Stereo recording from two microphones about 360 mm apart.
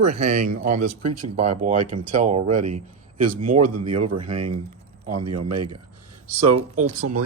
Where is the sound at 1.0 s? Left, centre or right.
Right.